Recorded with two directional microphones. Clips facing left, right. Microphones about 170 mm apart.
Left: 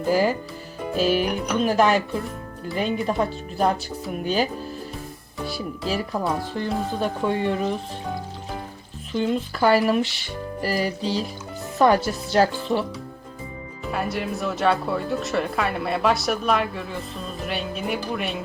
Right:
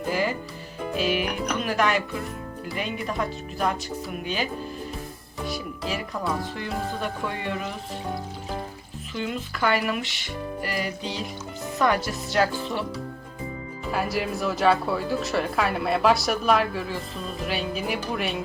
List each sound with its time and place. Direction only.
0.1 s speech: 35° left (ahead or behind)
6.5 s speech: 35° left (ahead or behind)
9.1 s speech: 35° left (ahead or behind)
13.9 s speech: centre (ahead or behind)